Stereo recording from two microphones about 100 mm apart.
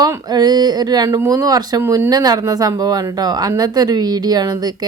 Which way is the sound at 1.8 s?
25° right (ahead or behind).